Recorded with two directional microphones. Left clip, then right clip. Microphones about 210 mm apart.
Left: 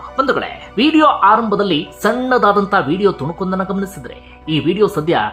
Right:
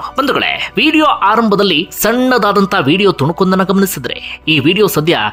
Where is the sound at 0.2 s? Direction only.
20° right (ahead or behind).